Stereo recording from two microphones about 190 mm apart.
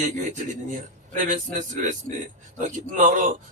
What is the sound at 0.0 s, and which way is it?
Speech, 40° right (ahead or behind).